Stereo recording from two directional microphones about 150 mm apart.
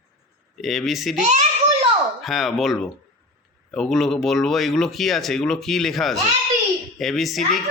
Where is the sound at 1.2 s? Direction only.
50° right (ahead or behind).